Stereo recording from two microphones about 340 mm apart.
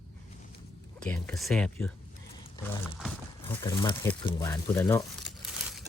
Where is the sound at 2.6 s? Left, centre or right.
Centre.